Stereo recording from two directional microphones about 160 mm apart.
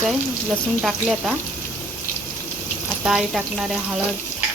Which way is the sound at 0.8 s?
Centre (ahead or behind).